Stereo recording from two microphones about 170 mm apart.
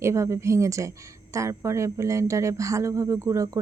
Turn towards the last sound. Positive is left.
turn(degrees=-20)  # may be behind; listen again after turning